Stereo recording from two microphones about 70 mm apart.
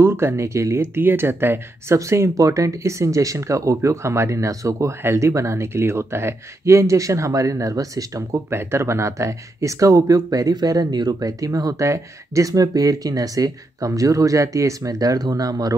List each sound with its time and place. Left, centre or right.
0.0 s speech: right
2.0 s speech: right
8.5 s speech: right